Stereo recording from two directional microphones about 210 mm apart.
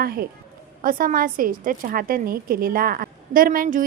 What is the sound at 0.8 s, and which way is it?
A woman's voice, 40° right (ahead or behind).